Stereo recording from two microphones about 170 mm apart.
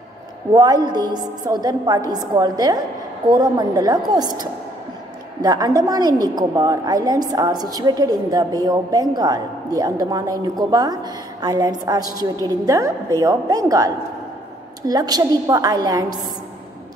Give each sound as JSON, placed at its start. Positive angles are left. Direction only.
{"t": 0.5, "sound": "a woman's voice", "side_deg": -20}